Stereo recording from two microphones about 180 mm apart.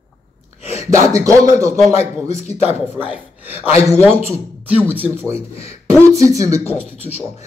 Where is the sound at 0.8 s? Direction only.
20° right (ahead or behind).